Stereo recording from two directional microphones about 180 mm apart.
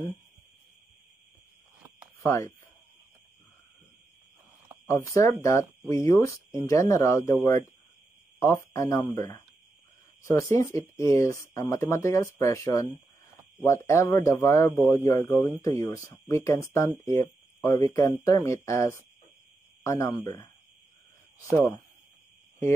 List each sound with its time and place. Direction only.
2.2 s speech: 15° left (ahead or behind)
4.8 s speech: 15° left (ahead or behind)
8.4 s speech: 15° left (ahead or behind)
21.5 s speech: 15° left (ahead or behind)